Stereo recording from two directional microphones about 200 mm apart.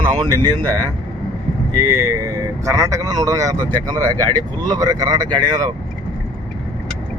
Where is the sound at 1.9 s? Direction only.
15° right (ahead or behind).